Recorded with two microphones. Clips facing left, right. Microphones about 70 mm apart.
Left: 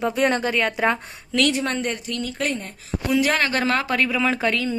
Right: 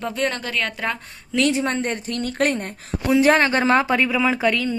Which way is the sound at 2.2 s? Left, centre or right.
Right.